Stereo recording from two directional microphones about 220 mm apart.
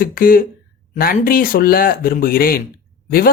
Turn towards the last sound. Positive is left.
turn(degrees=40)  # may be behind; listen again after turning